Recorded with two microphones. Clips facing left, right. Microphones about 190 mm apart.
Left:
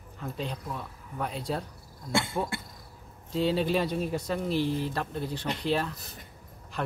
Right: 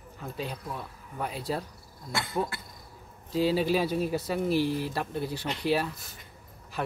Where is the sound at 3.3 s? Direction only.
5° right (ahead or behind).